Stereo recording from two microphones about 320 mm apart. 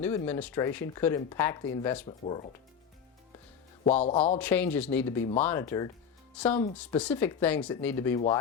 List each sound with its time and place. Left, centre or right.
0.0 s speech: centre
2.2 s music: left
3.8 s music: centre
4.4 s speech: centre